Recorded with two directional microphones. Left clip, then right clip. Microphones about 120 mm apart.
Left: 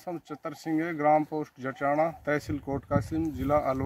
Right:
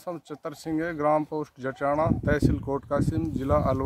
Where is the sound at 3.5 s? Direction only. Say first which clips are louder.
Right 2 dB; 20° right (ahead or behind).